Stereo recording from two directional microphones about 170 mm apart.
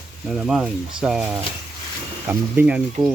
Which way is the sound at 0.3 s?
5° right (ahead or behind).